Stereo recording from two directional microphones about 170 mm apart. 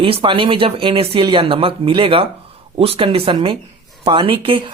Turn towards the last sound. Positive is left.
turn(degrees=-30)  # may be behind; listen again after turning